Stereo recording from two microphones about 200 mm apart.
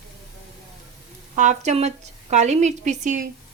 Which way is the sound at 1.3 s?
35° right (ahead or behind).